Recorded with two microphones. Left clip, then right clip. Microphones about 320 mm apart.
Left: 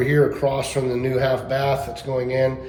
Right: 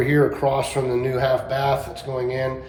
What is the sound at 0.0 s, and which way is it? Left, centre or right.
Speech, right.